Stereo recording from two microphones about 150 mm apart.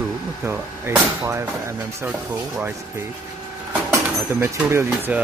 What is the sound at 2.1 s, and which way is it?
Speech, 5° right (ahead or behind).